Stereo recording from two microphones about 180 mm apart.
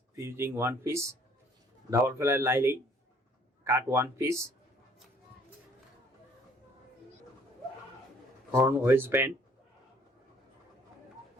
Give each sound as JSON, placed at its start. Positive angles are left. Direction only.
{"t": 0.2, "sound": "speech", "side_deg": -15}
{"t": 8.5, "sound": "speech", "side_deg": -10}